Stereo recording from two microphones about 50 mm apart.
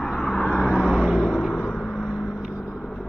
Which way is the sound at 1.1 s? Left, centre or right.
Centre.